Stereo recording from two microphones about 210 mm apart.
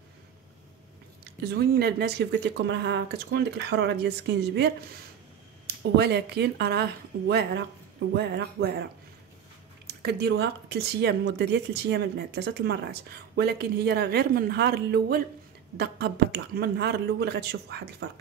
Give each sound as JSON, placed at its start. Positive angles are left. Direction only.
{"t": 1.5, "sound": "speech", "side_deg": -50}
{"t": 10.0, "sound": "speech", "side_deg": -50}